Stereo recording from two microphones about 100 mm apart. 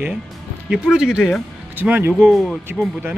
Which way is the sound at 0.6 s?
10° right (ahead or behind).